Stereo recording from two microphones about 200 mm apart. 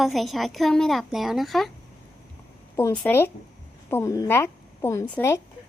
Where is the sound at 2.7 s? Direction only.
10° left (ahead or behind).